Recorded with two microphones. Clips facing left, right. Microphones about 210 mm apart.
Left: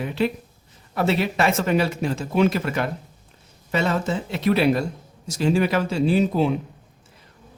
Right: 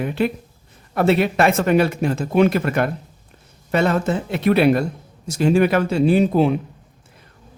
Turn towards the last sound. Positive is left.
turn(degrees=-55)  # may be behind; listen again after turning